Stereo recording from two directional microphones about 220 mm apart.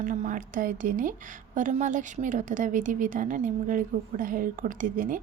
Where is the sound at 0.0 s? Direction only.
35° right (ahead or behind).